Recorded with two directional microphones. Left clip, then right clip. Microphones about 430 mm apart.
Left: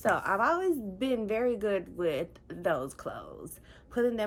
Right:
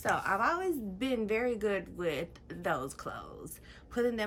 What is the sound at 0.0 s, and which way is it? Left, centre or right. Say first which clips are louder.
A woman's voice: left 3 dB; centre.